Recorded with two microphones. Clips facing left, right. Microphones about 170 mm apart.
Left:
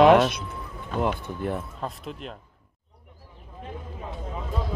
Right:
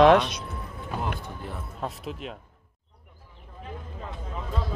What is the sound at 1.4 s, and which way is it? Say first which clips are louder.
Speech: left 11 dB; 60° left (ahead or behind).